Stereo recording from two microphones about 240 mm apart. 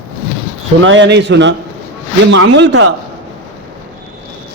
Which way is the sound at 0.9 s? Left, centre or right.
Right.